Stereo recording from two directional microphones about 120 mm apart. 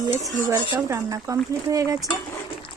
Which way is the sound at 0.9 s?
25° right (ahead or behind).